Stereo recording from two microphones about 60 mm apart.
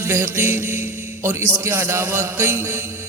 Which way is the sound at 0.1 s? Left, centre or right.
Right.